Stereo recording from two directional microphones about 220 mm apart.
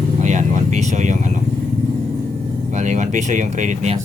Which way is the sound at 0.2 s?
35° right (ahead or behind).